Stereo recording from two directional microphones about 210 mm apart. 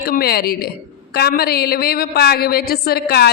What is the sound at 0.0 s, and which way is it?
A woman's voice, 45° left (ahead or behind).